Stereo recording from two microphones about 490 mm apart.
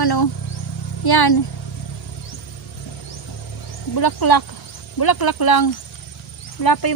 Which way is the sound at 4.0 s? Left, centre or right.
Left.